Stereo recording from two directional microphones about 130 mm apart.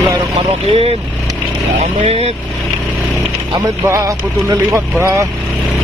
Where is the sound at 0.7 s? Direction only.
50° right (ahead or behind).